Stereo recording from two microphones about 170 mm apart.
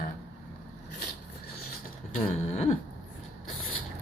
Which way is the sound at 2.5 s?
40° left (ahead or behind).